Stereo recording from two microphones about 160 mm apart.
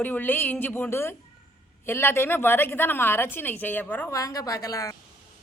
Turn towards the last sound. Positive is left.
turn(degrees=20)  # may be behind; listen again after turning